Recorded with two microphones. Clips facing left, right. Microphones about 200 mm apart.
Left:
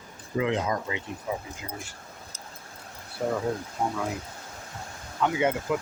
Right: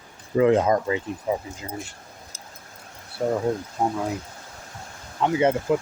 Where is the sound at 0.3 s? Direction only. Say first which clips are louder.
Right 8 dB; 45° right (ahead or behind).